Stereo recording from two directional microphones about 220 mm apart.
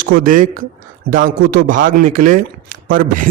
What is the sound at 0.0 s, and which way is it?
Speech, 40° right (ahead or behind).